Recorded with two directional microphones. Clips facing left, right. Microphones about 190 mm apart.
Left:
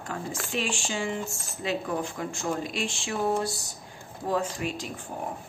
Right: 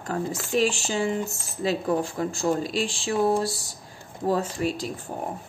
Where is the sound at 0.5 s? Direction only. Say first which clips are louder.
Right 8 dB; 40° right (ahead or behind).